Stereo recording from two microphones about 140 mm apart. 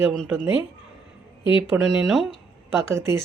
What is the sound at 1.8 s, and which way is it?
Speech, centre (ahead or behind).